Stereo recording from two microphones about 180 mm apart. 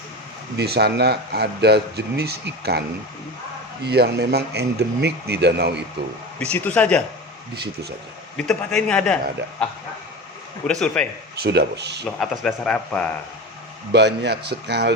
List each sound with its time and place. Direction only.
0.5 s a man's voice: 65° right (ahead or behind)
3.8 s a man's voice: 65° right (ahead or behind)
6.4 s a man's voice: 10° left (ahead or behind)
7.5 s a man's voice: 65° right (ahead or behind)
8.4 s speech: 5° left (ahead or behind)
10.7 s speech: 5° left (ahead or behind)
11.4 s speech: 65° right (ahead or behind)
12.2 s speech: centre (ahead or behind)
13.9 s speech: 65° right (ahead or behind)